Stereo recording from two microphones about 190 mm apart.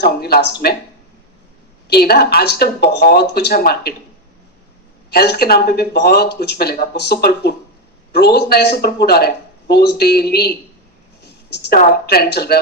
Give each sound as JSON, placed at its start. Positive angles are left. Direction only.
{"t": 0.0, "sound": "speech", "side_deg": 55}
{"t": 1.9, "sound": "speech", "side_deg": 55}
{"t": 5.1, "sound": "speech", "side_deg": 55}
{"t": 11.2, "sound": "a sound", "side_deg": 60}
{"t": 12.0, "sound": "speech", "side_deg": 55}